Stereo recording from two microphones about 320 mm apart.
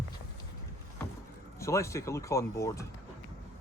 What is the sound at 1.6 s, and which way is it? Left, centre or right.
Speech, centre.